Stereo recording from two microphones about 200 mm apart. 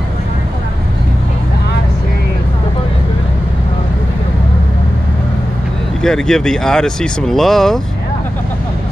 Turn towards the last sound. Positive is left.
turn(degrees=0)  # may be behind; listen again after turning